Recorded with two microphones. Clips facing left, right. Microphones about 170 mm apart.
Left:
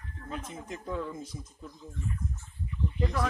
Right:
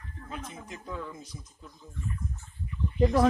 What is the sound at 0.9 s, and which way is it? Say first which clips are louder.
Speech: left 4 dB; 25° left (ahead or behind).